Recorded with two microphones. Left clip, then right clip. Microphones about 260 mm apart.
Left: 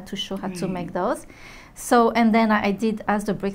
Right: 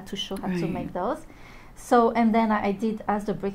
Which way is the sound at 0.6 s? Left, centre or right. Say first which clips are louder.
Left 4 dB; left.